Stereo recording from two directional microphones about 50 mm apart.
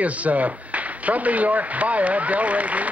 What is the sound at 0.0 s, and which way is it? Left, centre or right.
Speech, right.